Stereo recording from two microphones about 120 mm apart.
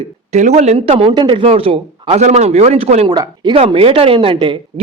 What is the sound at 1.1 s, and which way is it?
Speech, 40° right (ahead or behind).